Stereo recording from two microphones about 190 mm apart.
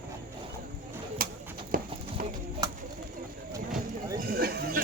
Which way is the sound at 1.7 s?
45° right (ahead or behind).